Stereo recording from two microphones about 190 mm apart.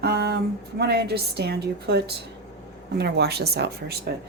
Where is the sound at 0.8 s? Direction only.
60° right (ahead or behind).